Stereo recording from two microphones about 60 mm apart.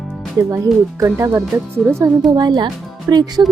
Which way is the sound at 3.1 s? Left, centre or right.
Right.